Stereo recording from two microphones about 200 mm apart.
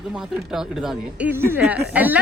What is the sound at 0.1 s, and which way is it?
Speech, 5° right (ahead or behind).